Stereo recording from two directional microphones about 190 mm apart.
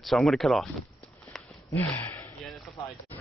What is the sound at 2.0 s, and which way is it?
Gasp, 5° left (ahead or behind).